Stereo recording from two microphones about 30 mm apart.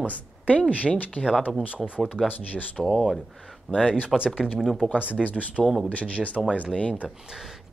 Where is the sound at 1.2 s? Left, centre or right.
Left.